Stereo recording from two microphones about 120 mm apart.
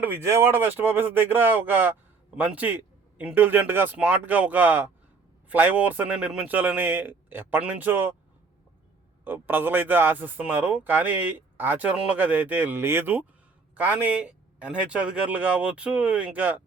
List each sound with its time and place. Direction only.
0.0 s a man's voice: 20° right (ahead or behind)
9.2 s a man's voice: 15° right (ahead or behind)